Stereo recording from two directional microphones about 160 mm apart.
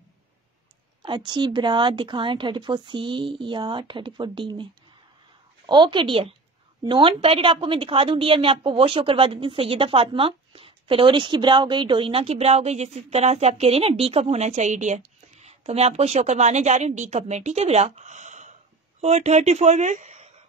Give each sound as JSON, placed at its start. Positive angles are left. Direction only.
{"t": 1.0, "sound": "speech", "side_deg": -30}
{"t": 5.7, "sound": "a woman's voice", "side_deg": -30}